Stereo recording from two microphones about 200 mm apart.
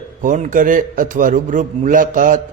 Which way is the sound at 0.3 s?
40° right (ahead or behind).